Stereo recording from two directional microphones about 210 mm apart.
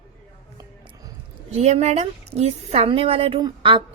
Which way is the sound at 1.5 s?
30° right (ahead or behind).